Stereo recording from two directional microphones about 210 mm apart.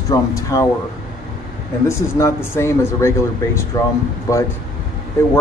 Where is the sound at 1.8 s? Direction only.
15° left (ahead or behind).